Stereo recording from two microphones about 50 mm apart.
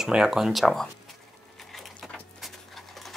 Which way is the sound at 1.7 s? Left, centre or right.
Centre.